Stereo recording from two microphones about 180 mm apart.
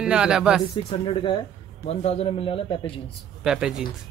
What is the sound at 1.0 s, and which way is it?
A man's voice, 25° left (ahead or behind).